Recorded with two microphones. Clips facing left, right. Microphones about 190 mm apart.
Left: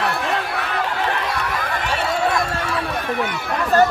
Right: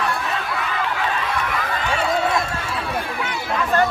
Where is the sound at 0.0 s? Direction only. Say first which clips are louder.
Left 2 dB; 70° left (ahead or behind).